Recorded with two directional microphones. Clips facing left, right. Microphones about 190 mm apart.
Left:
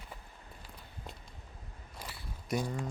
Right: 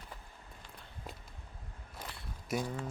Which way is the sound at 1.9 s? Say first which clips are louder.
Even; 5° left (ahead or behind).